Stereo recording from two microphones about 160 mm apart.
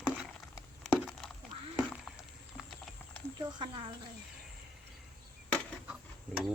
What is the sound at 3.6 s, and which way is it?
Speech, 30° right (ahead or behind).